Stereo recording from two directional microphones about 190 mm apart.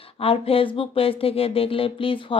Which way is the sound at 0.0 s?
30° left (ahead or behind).